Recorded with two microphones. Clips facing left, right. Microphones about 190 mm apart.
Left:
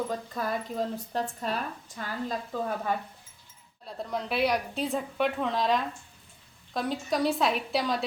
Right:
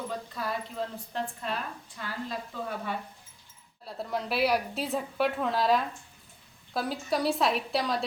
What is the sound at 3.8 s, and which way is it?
Speech, centre (ahead or behind).